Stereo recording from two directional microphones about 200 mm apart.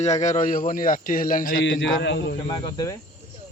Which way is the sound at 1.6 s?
65° left (ahead or behind).